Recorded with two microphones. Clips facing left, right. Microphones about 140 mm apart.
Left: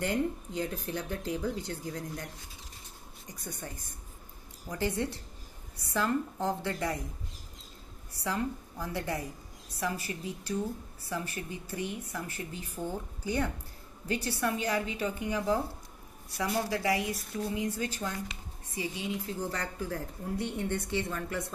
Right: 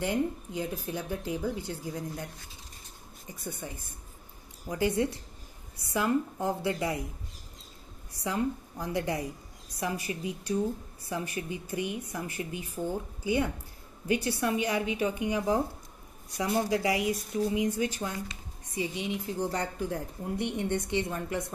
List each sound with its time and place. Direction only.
0.0 s a woman's voice: 10° right (ahead or behind)
4.6 s a woman's voice: 15° right (ahead or behind)
8.2 s a woman's voice: 20° right (ahead or behind)
19.2 s speech: 20° right (ahead or behind)